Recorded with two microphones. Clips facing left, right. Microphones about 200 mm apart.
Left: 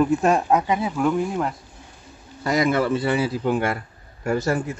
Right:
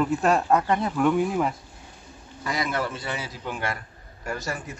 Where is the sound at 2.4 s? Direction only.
45° left (ahead or behind).